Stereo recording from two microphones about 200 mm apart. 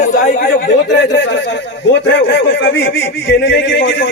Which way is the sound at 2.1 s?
70° left (ahead or behind).